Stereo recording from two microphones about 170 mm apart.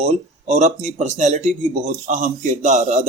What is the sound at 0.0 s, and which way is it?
Speech, 40° right (ahead or behind).